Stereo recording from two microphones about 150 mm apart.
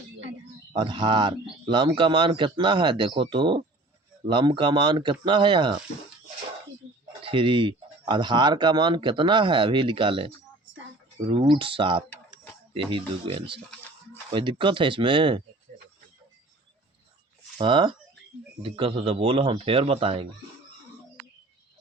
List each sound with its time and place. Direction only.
0.7 s speech: 35° right (ahead or behind)
7.2 s speech: 35° right (ahead or behind)
17.6 s speech: 30° right (ahead or behind)